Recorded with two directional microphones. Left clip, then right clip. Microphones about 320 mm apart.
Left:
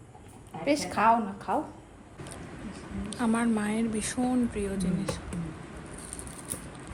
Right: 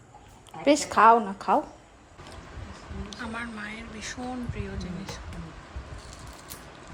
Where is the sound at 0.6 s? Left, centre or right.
Right.